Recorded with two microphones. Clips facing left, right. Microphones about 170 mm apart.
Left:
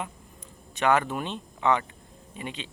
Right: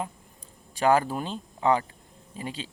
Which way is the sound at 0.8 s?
35° right (ahead or behind).